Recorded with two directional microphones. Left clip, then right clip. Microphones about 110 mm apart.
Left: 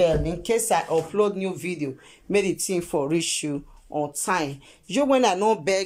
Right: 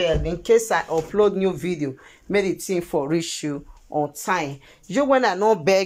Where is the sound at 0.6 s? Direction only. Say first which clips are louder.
Even; 15° left (ahead or behind).